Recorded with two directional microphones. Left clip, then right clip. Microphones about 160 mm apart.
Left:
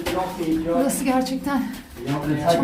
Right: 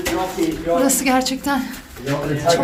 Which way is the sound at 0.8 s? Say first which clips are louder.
Right 5 dB; 5° right (ahead or behind).